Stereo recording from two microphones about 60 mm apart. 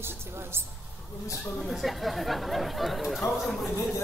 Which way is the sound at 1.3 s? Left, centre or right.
Centre.